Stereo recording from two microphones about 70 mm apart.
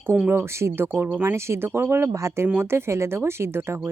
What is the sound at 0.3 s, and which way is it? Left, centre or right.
A woman's voice, right.